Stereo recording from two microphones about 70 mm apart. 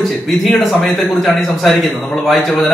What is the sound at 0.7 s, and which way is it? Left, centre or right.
A man's voice, centre.